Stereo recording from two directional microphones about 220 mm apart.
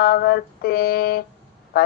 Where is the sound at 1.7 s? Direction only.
45° left (ahead or behind).